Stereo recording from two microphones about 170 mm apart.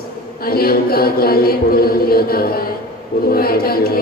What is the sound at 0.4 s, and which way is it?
A man's voice, 65° left (ahead or behind).